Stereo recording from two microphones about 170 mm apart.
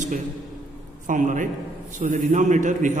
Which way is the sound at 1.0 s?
50° right (ahead or behind).